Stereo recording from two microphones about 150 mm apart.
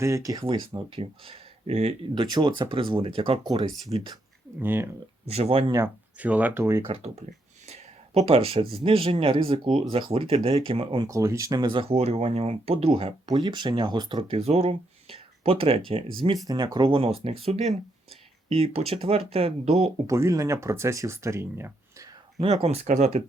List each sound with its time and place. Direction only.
0.0 s speech: 20° right (ahead or behind)
0.4 s speech: 35° right (ahead or behind)
2.1 s speech: 30° right (ahead or behind)
4.6 s speech: 15° right (ahead or behind)
5.3 s speech: 40° right (ahead or behind)
5.7 s speech: 15° right (ahead or behind)
6.8 s speech: 35° right (ahead or behind)
11.1 s speech: 20° right (ahead or behind); by 13.1 s 40° right (ahead or behind)
13.2 s speech: 25° right (ahead or behind)
16.2 s speech: 25° right (ahead or behind); by 19.9 s 40° right (ahead or behind)
20.1 s speech: 20° right (ahead or behind)
22.4 s speech: 45° right (ahead or behind)